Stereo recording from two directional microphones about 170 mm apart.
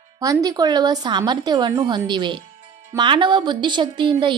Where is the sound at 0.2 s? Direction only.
20° right (ahead or behind).